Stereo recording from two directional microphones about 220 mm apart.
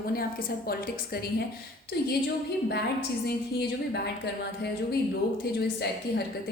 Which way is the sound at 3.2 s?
50° left (ahead or behind).